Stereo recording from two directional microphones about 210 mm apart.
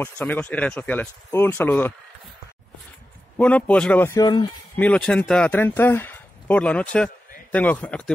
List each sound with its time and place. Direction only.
0.0 s speech: 10° left (ahead or behind)
3.3 s speech: 5° left (ahead or behind)
4.7 s speech: 5° left (ahead or behind)